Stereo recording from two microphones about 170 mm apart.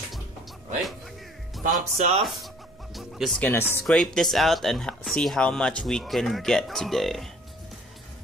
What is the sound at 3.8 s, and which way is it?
Speech, centre (ahead or behind).